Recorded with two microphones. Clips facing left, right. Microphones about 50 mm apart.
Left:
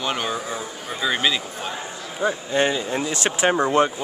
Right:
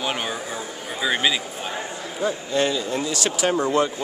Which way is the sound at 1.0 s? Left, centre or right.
Centre.